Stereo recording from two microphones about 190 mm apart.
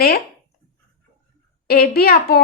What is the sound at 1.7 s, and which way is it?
Speech, 55° left (ahead or behind).